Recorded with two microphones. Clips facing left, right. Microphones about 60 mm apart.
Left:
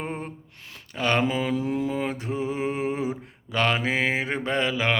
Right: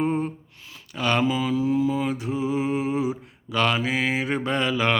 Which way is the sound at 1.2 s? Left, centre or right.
Left.